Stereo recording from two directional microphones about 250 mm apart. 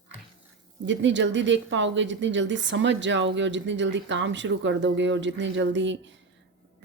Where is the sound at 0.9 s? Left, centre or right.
Right.